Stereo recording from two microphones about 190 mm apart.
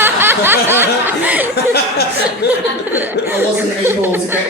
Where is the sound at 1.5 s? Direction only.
60° left (ahead or behind).